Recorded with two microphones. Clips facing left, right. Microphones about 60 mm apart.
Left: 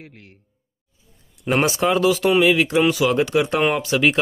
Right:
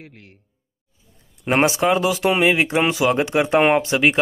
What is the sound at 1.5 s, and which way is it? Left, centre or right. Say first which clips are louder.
Speech: right 1 dB; right.